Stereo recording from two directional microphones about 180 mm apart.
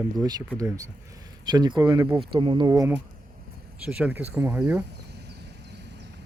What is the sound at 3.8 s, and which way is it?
Speech, 5° right (ahead or behind).